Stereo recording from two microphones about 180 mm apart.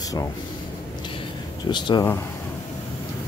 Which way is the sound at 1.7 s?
25° left (ahead or behind).